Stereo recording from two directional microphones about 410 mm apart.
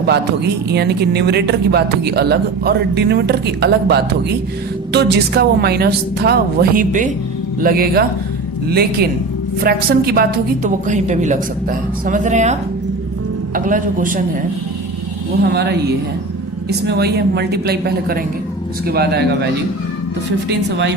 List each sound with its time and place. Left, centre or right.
0.7 s speech: right
15.4 s speech: right
20.7 s speech: right